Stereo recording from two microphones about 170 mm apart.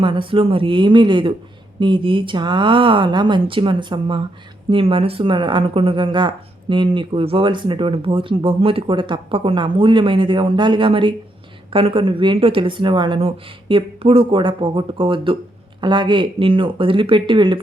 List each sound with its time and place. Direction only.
0.0 s a woman's voice: 30° right (ahead or behind)